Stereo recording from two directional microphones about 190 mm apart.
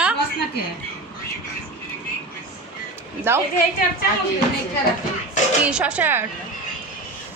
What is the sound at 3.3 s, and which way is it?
Speech, 10° right (ahead or behind).